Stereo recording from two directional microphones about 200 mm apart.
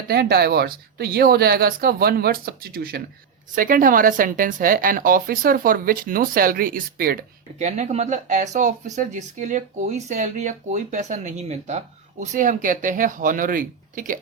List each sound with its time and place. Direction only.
0.1 s speech: 50° right (ahead or behind)
7.6 s speech: 35° right (ahead or behind)